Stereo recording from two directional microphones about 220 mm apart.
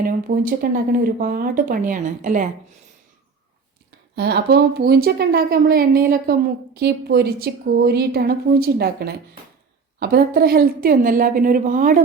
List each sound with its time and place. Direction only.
0.0 s a woman's voice: 40° right (ahead or behind)
4.1 s a woman's voice: 50° right (ahead or behind)